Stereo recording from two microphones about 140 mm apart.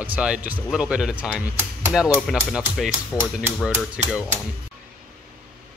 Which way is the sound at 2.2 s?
5° right (ahead or behind).